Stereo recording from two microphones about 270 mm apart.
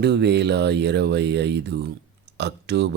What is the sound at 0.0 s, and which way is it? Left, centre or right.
Speech, right.